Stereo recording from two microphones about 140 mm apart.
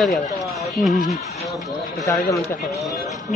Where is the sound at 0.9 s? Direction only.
65° left (ahead or behind).